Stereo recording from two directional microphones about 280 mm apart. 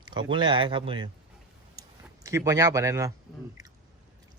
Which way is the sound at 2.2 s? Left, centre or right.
Centre.